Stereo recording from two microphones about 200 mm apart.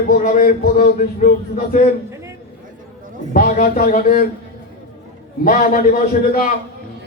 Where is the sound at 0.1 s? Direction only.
40° left (ahead or behind).